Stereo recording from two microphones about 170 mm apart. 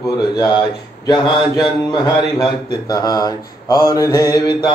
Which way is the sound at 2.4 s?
25° left (ahead or behind).